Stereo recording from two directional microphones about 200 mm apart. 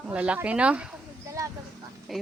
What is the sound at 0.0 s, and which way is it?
Speech, 5° right (ahead or behind).